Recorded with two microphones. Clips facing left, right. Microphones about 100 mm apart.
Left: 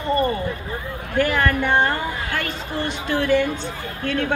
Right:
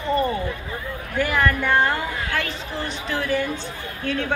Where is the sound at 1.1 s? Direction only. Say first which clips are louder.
Left 2 dB; 60° left (ahead or behind).